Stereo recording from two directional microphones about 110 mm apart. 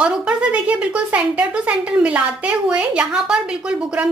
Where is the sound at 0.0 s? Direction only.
10° right (ahead or behind).